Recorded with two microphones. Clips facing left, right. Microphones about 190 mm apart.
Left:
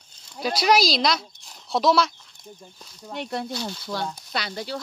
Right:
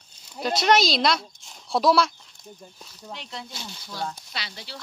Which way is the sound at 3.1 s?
55° left (ahead or behind).